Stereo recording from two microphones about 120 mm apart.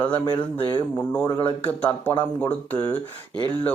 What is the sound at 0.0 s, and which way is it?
Speech, 15° left (ahead or behind).